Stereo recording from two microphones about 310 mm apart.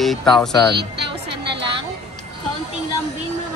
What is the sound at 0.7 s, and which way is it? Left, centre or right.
Speech, right.